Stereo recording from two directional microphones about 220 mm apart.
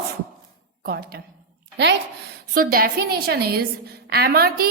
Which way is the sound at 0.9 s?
45° right (ahead or behind).